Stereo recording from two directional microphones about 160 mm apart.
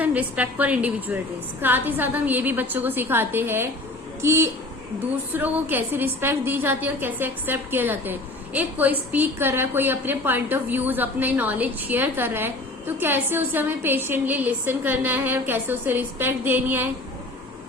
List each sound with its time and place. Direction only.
0.0 s a woman's voice: 10° right (ahead or behind)